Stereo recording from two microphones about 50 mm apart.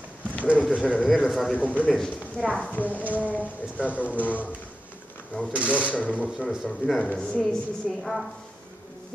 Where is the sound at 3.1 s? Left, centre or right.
Left.